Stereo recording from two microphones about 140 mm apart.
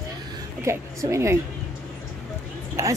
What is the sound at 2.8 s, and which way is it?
Speech, 20° right (ahead or behind).